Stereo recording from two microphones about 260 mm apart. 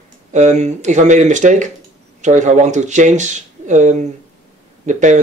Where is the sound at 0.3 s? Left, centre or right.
Right.